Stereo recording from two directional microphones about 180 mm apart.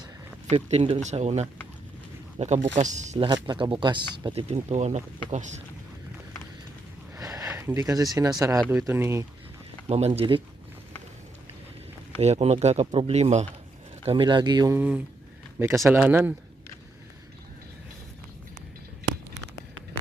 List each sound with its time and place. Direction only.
0.5 s speech: 35° right (ahead or behind)
3.4 s speech: 25° right (ahead or behind)
7.2 s a sound: 20° right (ahead or behind)
7.4 s speech: 15° right (ahead or behind)
9.9 s speech: 35° right (ahead or behind)
12.2 s speech: 35° right (ahead or behind)
14.8 s speech: 10° right (ahead or behind)